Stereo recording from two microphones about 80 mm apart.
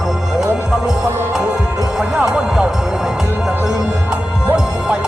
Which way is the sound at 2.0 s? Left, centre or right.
Centre.